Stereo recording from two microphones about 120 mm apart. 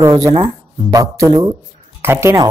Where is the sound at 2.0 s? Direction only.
20° right (ahead or behind).